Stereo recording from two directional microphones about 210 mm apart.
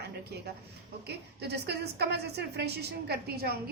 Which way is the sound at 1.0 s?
50° right (ahead or behind).